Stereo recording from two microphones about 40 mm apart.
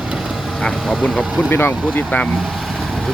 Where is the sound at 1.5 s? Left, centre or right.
Left.